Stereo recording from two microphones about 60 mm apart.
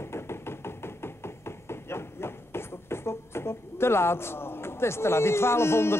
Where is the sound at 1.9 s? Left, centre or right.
Left.